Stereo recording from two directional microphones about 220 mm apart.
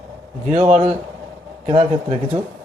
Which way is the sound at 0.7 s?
30° right (ahead or behind).